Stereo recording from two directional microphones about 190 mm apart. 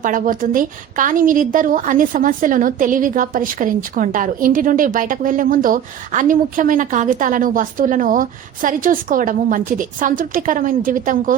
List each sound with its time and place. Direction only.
0.0 s a woman's voice: 45° right (ahead or behind)